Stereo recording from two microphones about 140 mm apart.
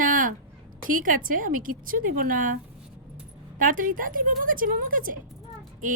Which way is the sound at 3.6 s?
75° right (ahead or behind).